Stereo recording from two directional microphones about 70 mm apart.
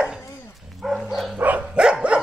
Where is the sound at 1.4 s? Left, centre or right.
Right.